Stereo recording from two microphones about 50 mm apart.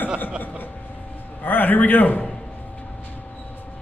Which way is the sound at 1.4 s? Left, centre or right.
Left.